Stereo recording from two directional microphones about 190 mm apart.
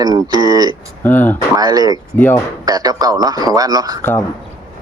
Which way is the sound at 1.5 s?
20° right (ahead or behind).